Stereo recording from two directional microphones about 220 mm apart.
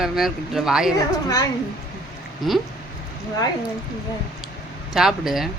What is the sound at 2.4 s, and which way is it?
Speech, centre (ahead or behind).